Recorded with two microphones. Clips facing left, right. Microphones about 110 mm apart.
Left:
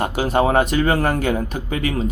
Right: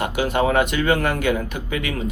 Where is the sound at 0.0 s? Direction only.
35° left (ahead or behind).